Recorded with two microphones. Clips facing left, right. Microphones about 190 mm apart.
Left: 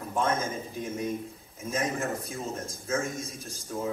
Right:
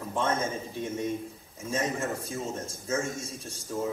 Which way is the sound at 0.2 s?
30° right (ahead or behind).